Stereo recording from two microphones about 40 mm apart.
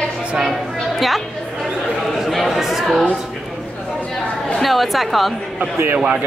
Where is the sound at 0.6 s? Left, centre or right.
Centre.